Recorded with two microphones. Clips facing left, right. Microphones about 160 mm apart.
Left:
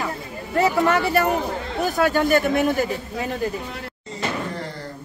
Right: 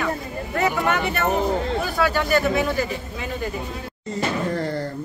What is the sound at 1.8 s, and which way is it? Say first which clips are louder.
A man's voice: left 3 dB; 45° left (ahead or behind).